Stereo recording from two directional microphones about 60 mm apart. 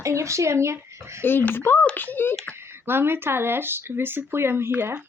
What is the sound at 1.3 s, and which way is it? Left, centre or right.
Speech, left.